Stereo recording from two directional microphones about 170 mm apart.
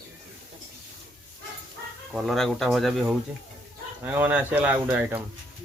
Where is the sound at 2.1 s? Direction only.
Centre (ahead or behind).